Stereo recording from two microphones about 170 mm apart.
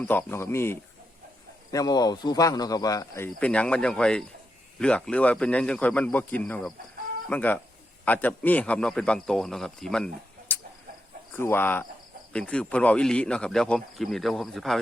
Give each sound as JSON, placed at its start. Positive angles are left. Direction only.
{"t": 0.0, "sound": "speech", "side_deg": 15}
{"t": 3.4, "sound": "speech", "side_deg": 5}
{"t": 10.5, "sound": "chicken", "side_deg": 10}
{"t": 11.3, "sound": "speech", "side_deg": 15}